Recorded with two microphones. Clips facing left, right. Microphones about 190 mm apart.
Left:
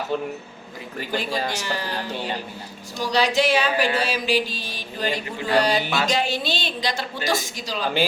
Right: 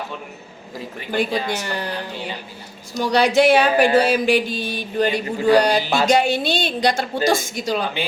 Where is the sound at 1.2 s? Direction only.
55° right (ahead or behind).